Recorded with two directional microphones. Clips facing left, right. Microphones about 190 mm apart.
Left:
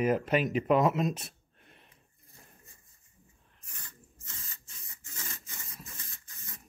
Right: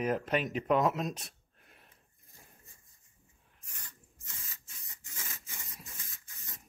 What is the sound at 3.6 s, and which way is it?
Spray, 15° right (ahead or behind).